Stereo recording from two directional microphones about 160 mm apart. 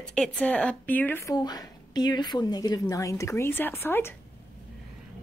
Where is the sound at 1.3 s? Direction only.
25° left (ahead or behind).